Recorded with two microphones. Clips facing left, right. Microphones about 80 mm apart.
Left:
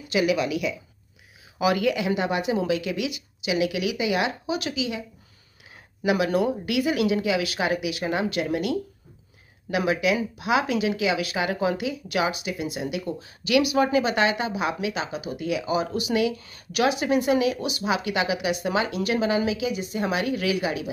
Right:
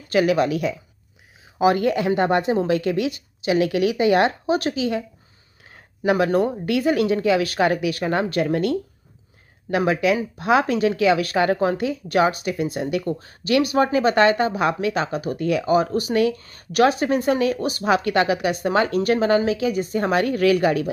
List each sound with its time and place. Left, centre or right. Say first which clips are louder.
0.1 s speech: right 5 dB; right
6.0 s speech: right 3 dB; right